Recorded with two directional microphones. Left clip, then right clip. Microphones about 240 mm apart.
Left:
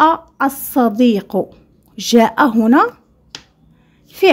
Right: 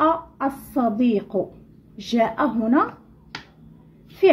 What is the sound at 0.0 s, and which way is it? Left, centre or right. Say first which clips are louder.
A woman's voice: left 8 dB; left.